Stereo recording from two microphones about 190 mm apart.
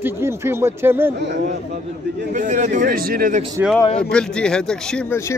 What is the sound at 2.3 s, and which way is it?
A man's voice, 40° right (ahead or behind).